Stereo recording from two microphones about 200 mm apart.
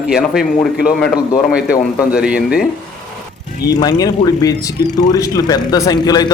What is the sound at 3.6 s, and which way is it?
Speech, 20° left (ahead or behind).